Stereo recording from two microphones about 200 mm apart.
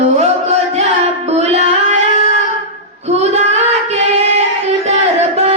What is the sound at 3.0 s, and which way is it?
Child singing, 35° right (ahead or behind).